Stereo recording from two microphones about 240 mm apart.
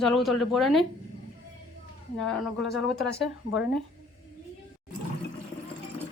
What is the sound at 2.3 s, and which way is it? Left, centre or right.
A woman's voice, centre.